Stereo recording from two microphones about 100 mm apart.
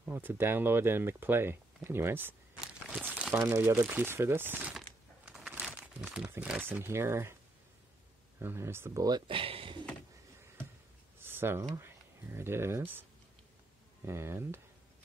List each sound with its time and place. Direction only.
0.0 s speech: 20° right (ahead or behind)
3.0 s crumpling: 10° right (ahead or behind)
3.3 s speech: 25° right (ahead or behind)
5.3 s crumpling: 10° right (ahead or behind)
6.6 s speech: 20° right (ahead or behind)
8.4 s speech: 25° right (ahead or behind)
9.3 s a sound: 65° right (ahead or behind)
11.1 s a sound: 20° right (ahead or behind)
11.7 s speech: 25° right (ahead or behind)
14.0 s speech: 25° right (ahead or behind)